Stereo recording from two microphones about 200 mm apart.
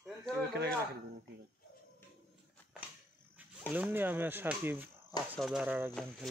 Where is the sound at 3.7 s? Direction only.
10° right (ahead or behind).